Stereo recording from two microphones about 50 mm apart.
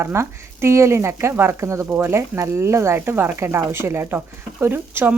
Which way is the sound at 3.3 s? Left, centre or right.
Right.